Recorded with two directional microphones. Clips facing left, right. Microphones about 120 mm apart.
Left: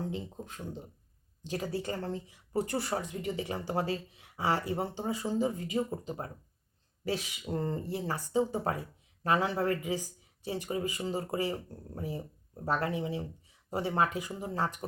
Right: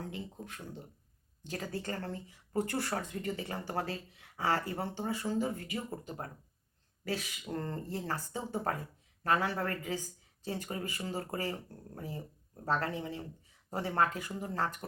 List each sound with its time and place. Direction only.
0.0 s speech: 25° left (ahead or behind)